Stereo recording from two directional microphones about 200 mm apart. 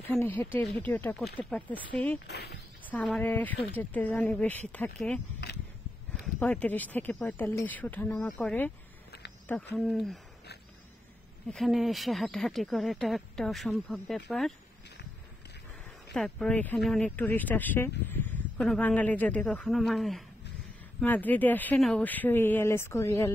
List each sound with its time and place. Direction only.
0.1 s a woman's voice: 10° left (ahead or behind)
2.2 s speech: 55° left (ahead or behind)
2.8 s a woman's voice: 5° left (ahead or behind)
6.4 s a woman's voice: 5° left (ahead or behind)
11.4 s speech: centre (ahead or behind)
16.1 s a woman's voice: 5° left (ahead or behind)